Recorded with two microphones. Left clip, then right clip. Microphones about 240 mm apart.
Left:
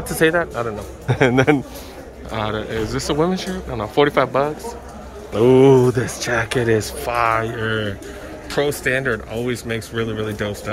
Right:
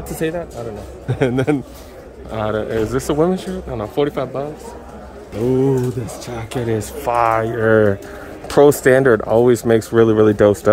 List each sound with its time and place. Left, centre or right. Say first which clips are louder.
0.2 s a man's voice: left 6 dB; centre
5.5 s speech: left 6 dB; centre
8.5 s speech: right 9 dB; right